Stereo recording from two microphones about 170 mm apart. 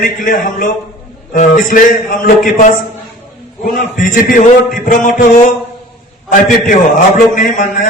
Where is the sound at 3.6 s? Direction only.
55° left (ahead or behind).